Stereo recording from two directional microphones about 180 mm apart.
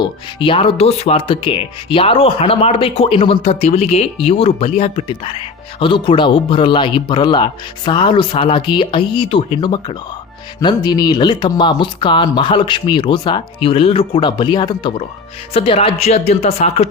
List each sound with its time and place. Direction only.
0.0 s speech: 30° left (ahead or behind)